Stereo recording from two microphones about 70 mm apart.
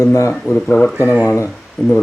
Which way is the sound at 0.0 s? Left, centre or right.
Left.